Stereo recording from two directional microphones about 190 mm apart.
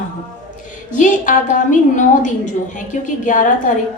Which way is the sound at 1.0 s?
40° left (ahead or behind).